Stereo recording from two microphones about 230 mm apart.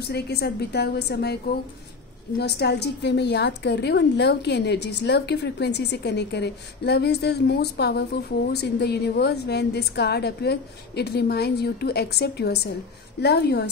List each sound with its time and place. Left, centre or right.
0.1 s a woman's voice: left